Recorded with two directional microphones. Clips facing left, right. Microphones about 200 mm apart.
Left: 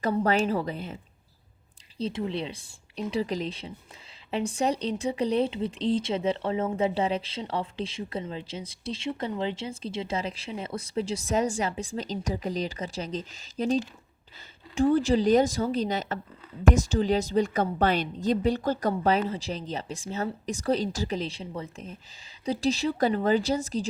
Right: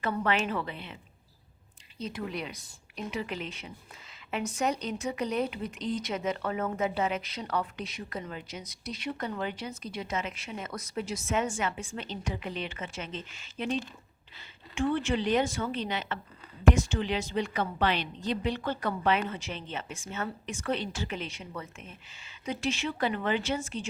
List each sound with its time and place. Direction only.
0.0 s speech: 35° left (ahead or behind)
2.0 s speech: 30° left (ahead or behind)